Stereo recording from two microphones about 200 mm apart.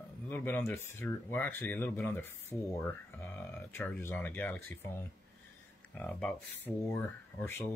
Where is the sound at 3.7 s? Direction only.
10° left (ahead or behind).